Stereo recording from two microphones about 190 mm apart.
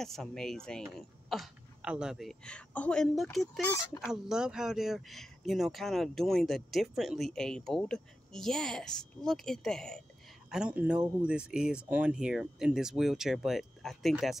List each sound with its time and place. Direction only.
0.0 s speech: centre (ahead or behind)